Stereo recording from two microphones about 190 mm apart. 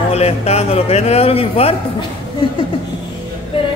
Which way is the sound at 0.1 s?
35° left (ahead or behind).